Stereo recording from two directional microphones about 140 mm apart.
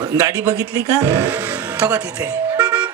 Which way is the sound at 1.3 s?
10° right (ahead or behind).